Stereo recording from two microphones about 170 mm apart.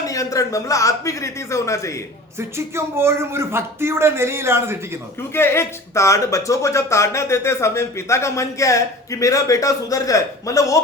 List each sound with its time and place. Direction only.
0.1 s speech: 20° left (ahead or behind)
2.4 s a man's voice: 15° right (ahead or behind)
5.3 s speech: 15° left (ahead or behind)